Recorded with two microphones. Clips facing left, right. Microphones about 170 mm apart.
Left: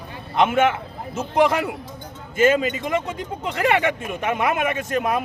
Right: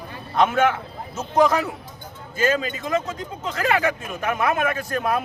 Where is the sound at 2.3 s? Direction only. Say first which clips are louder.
Left 5 dB; 25° left (ahead or behind).